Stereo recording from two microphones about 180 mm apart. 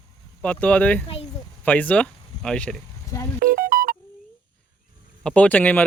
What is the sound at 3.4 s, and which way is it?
Music, 50° right (ahead or behind).